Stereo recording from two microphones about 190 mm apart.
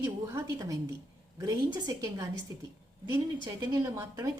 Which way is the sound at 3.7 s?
15° right (ahead or behind).